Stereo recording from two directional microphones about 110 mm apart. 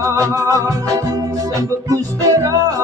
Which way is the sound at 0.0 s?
30° right (ahead or behind).